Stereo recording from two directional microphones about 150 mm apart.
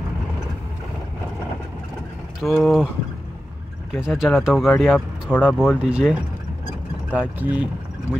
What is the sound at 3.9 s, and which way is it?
Speech, 5° right (ahead or behind).